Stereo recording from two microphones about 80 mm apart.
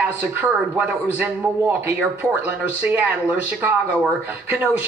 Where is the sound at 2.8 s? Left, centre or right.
Right.